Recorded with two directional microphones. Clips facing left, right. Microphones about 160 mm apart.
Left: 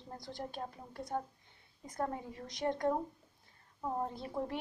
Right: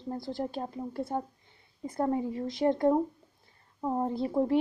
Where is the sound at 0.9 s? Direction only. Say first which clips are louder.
Right 4 dB; 5° right (ahead or behind).